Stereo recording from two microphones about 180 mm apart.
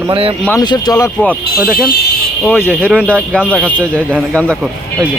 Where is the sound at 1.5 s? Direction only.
15° right (ahead or behind).